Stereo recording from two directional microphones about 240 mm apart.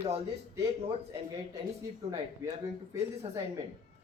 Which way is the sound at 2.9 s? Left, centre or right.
Centre.